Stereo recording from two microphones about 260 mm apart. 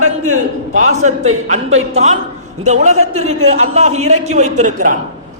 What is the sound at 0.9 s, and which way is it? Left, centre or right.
A man's voice, right.